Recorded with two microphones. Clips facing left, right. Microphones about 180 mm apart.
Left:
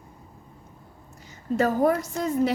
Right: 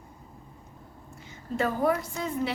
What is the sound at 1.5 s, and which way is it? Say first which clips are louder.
Speech: left 4 dB; 40° left (ahead or behind).